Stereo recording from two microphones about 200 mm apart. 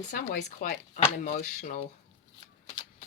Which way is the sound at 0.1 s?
45° left (ahead or behind).